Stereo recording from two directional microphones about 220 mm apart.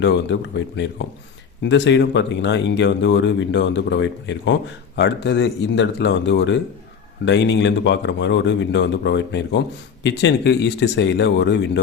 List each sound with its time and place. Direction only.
0.0 s a man's voice: 55° left (ahead or behind)